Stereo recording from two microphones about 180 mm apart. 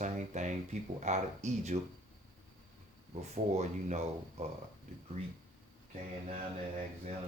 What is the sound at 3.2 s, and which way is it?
Speech, 40° right (ahead or behind).